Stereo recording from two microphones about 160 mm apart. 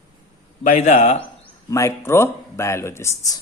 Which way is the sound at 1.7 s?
15° left (ahead or behind).